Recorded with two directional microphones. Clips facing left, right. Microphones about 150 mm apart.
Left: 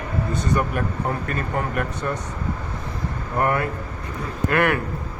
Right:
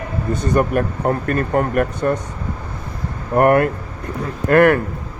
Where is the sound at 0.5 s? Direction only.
50° right (ahead or behind).